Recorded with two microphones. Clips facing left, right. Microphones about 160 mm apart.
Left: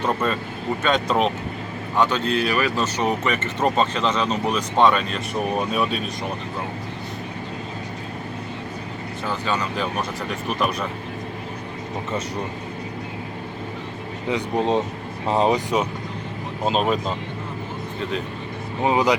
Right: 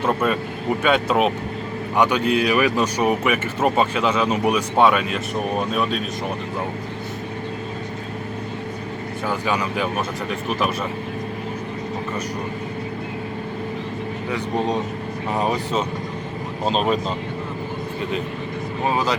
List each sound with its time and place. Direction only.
0.0 s speech: 10° right (ahead or behind)
9.2 s speech: 10° right (ahead or behind)
14.3 s speech: 20° left (ahead or behind)
16.6 s speech: 5° left (ahead or behind)
18.8 s speech: 20° left (ahead or behind)